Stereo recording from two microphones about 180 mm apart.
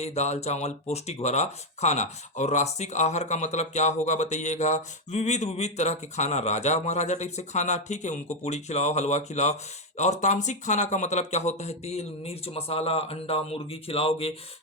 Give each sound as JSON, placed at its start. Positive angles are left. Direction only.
{"t": 0.0, "sound": "speech", "side_deg": 35}